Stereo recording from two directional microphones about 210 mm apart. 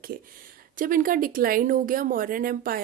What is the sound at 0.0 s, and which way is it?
Speech, 45° right (ahead or behind).